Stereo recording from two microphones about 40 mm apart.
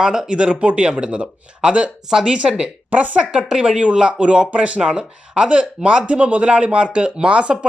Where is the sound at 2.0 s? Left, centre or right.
Centre.